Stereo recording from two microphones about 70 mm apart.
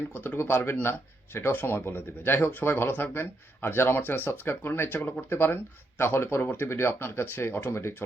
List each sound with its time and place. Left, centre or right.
0.1 s speech: left